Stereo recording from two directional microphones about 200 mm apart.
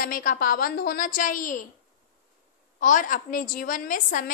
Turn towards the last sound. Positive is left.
turn(degrees=40)  # may be behind; listen again after turning